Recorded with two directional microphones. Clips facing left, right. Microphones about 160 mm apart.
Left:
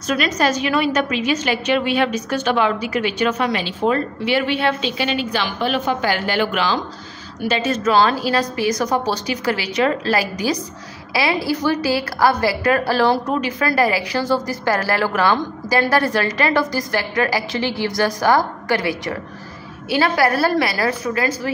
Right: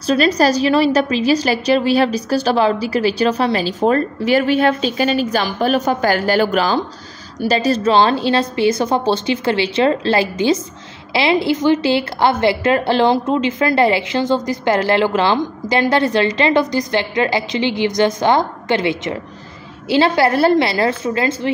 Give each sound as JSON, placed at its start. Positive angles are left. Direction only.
{"t": 0.0, "sound": "a woman's voice", "side_deg": -30}